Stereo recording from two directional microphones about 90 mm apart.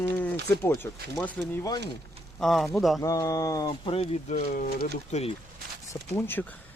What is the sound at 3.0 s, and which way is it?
Speech, 40° left (ahead or behind).